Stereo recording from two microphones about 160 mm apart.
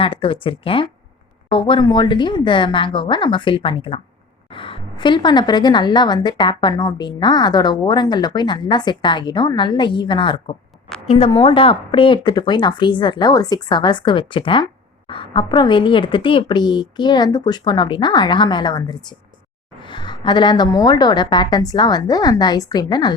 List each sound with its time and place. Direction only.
0.0 s a woman's voice: 35° left (ahead or behind)
10.8 s a sound: 5° left (ahead or behind)
11.1 s speech: 40° left (ahead or behind)